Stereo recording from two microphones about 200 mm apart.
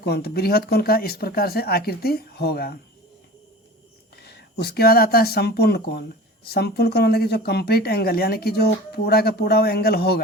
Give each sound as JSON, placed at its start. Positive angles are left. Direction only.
{"t": 0.0, "sound": "speech", "side_deg": 55}
{"t": 4.1, "sound": "speech", "side_deg": 55}